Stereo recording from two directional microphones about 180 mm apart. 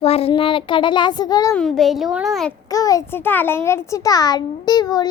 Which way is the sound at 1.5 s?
Centre (ahead or behind).